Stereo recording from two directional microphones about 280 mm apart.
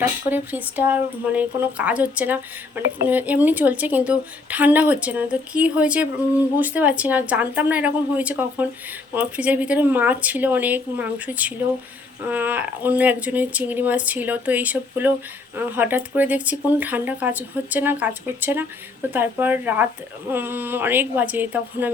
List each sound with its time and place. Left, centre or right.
0.3 s speech: centre